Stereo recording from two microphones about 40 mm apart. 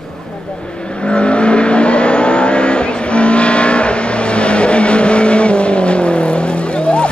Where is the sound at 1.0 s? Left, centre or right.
Left.